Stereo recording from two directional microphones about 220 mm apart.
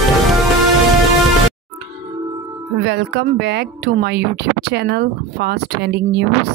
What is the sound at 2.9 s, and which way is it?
Speech, 50° right (ahead or behind).